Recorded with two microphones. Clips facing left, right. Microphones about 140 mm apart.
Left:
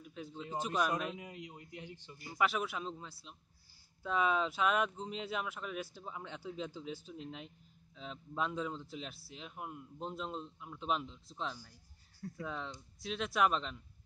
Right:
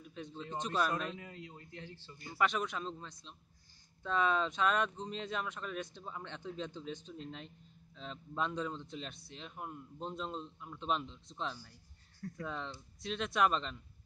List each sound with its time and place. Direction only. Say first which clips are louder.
0.0 s a sound: even; 5° left (ahead or behind)
0.4 s speech: even; 10° left (ahead or behind)
2.3 s speech: even; 5° left (ahead or behind)